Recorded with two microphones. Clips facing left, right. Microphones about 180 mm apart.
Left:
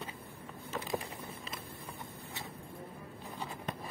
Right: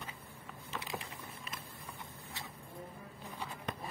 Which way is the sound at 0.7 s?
45° left (ahead or behind).